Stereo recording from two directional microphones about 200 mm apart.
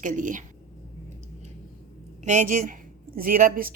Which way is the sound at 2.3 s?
40° right (ahead or behind).